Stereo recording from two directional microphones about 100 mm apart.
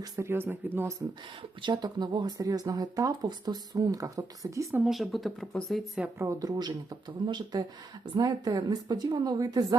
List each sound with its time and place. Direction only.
0.0 s speech: 25° right (ahead or behind)
1.7 s speech: 45° right (ahead or behind)
4.9 s speech: centre (ahead or behind)
6.1 s speech: 35° right (ahead or behind)